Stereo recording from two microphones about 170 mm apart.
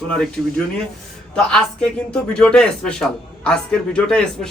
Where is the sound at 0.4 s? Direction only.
5° left (ahead or behind).